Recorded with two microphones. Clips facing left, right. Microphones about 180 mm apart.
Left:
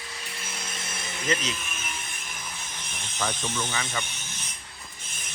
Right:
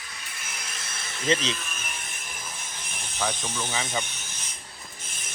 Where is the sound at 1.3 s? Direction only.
30° right (ahead or behind).